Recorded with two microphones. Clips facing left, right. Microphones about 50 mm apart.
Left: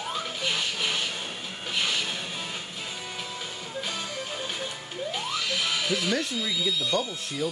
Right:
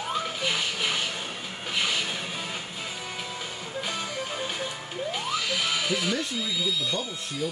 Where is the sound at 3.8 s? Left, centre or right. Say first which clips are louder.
Right 3 dB; centre.